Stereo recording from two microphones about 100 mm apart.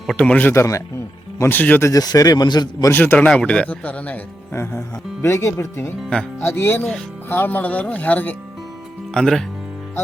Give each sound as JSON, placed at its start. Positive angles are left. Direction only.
{"t": 0.2, "sound": "speech", "side_deg": 15}
{"t": 0.5, "sound": "speech", "side_deg": 30}
{"t": 1.9, "sound": "speech", "side_deg": 40}
{"t": 2.9, "sound": "speech", "side_deg": 20}
{"t": 4.5, "sound": "speech", "side_deg": 25}
{"t": 9.1, "sound": "speech", "side_deg": 5}